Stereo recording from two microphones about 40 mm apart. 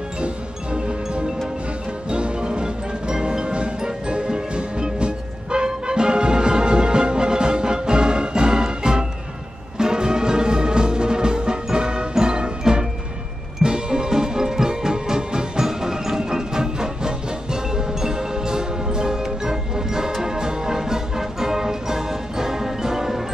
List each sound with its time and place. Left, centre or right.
0.2 s music: right; by 23.2 s centre